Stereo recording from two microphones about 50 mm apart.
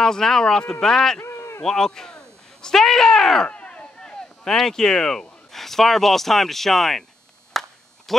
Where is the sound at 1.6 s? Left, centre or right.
Centre.